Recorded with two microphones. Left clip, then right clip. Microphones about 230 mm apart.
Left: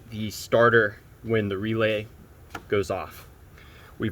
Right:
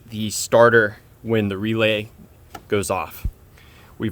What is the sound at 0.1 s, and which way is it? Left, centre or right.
Speech, right.